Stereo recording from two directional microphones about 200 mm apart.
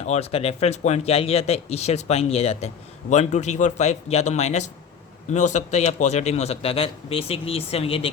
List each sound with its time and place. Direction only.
0.0 s a man's voice: 35° left (ahead or behind)